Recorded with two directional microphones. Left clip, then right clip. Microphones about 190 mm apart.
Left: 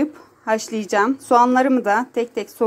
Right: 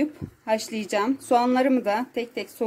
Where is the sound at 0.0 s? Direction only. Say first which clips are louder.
Left 4 dB; 5° left (ahead or behind).